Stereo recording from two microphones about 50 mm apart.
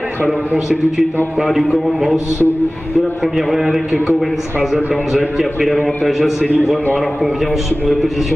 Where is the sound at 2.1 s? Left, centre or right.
Left.